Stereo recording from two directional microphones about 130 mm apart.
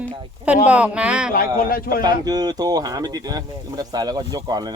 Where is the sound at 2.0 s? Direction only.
30° right (ahead or behind).